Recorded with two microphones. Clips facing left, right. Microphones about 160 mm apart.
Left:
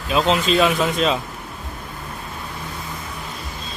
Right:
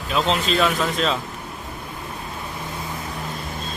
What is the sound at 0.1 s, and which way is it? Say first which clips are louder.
Speech: left 3 dB; 15° left (ahead or behind).